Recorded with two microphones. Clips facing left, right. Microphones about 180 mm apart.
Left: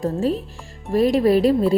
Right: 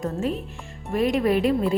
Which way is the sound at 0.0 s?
35° left (ahead or behind).